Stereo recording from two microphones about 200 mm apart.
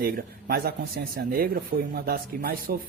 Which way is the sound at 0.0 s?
50° right (ahead or behind).